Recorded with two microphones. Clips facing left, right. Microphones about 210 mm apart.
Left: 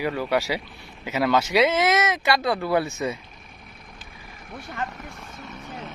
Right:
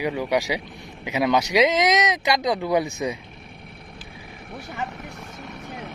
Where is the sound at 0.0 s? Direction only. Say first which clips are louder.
Right 1 dB; 15° right (ahead or behind).